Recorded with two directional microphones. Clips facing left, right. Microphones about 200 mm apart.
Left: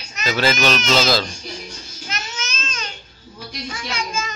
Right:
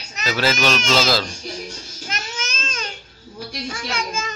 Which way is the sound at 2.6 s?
45° right (ahead or behind).